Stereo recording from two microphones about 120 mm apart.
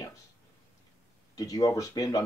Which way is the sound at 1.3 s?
30° left (ahead or behind).